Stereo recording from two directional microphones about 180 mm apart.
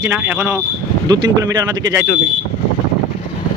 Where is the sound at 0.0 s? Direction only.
15° right (ahead or behind).